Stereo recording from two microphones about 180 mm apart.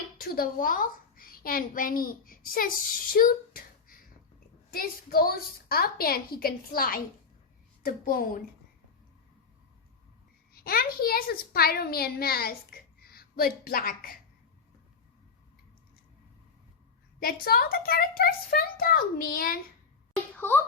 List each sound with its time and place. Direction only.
0.2 s a child's voice: 55° left (ahead or behind)
10.5 s a child's voice: 55° left (ahead or behind)
17.2 s a child's voice: 55° left (ahead or behind)
20.1 s a sound: 10° left (ahead or behind)